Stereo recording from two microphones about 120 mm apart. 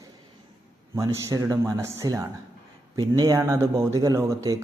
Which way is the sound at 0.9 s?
25° right (ahead or behind).